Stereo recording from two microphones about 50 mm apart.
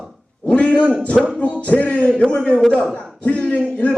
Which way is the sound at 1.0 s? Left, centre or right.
Left.